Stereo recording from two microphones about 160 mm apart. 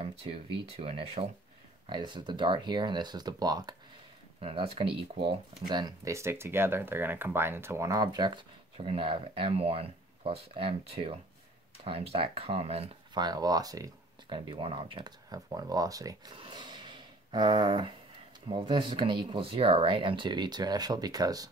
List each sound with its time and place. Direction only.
0.0 s speech: 35° right (ahead or behind)
4.4 s speech: 35° right (ahead or behind)
13.2 s speech: 25° right (ahead or behind)